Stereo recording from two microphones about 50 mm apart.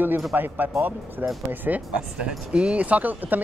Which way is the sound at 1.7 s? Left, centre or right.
Right.